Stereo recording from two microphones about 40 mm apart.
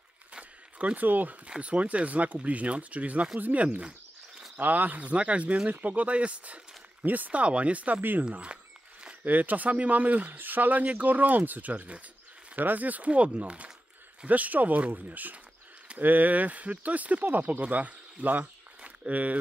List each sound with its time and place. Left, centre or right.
0.3 s a sound: right
1.6 s speech: right
7.1 s speech: right
8.0 s speech: right
8.3 s speech: right
9.2 s speech: right
10.3 s speech: right
18.9 s a sound: right